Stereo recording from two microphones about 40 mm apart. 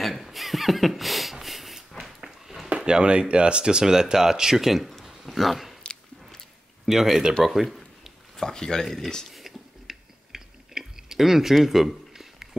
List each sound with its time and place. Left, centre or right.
0.0 s chuckle: centre
2.0 s a sound: centre
2.8 s speech: right
4.8 s a sound: centre
6.9 s speech: centre
8.4 s speech: centre
8.8 s speech: centre
9.3 s chewing: centre
11.5 s a sound: centre